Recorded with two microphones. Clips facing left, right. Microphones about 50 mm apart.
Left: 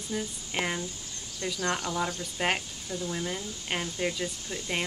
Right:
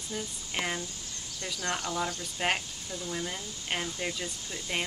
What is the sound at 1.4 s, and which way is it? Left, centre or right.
Speech, left.